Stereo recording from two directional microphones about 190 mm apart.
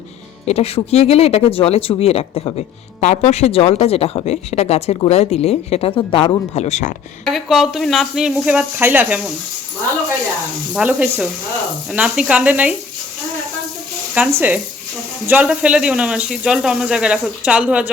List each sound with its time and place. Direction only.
0.4 s speech: 35° left (ahead or behind)
7.3 s speech: centre (ahead or behind)
10.8 s speech: 5° right (ahead or behind)
14.1 s speech: 10° right (ahead or behind)